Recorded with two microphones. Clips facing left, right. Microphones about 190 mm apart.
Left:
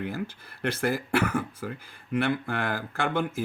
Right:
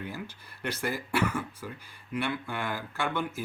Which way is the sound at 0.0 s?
55° left (ahead or behind).